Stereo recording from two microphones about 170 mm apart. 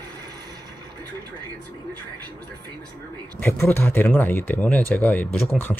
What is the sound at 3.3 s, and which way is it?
Speech, 15° left (ahead or behind).